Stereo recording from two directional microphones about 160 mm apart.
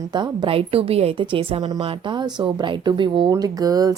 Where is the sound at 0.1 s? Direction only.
30° right (ahead or behind).